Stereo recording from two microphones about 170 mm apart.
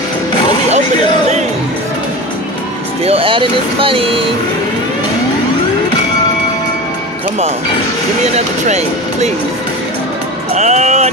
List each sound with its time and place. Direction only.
3.0 s music: 35° right (ahead or behind)
3.8 s speech: 30° right (ahead or behind)
8.2 s speech: 40° right (ahead or behind)
10.5 s music: 40° right (ahead or behind)